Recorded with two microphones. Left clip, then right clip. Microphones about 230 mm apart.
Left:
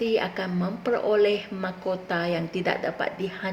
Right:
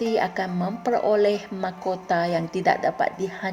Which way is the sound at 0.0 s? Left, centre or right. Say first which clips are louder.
Right 2 dB; right.